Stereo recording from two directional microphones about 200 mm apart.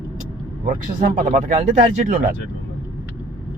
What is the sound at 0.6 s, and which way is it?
Speech, 40° right (ahead or behind).